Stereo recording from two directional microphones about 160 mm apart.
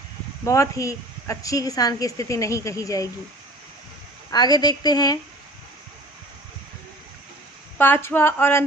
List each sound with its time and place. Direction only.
0.4 s a woman's voice: 20° left (ahead or behind)
4.3 s a woman's voice: 25° left (ahead or behind)
7.8 s a sound: 15° left (ahead or behind)